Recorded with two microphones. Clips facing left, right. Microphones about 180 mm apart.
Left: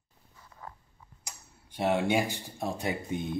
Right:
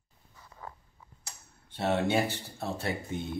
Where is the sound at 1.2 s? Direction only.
15° left (ahead or behind).